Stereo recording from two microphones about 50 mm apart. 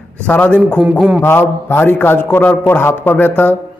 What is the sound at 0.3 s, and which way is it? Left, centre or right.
Speech, left.